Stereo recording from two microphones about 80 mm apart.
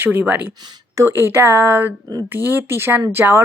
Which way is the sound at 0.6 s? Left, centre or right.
Right.